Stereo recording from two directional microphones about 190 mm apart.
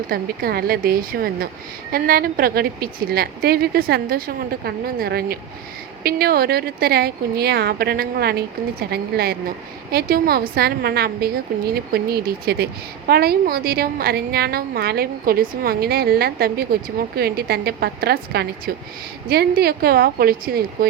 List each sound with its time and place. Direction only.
0.1 s a woman's voice: 50° right (ahead or behind)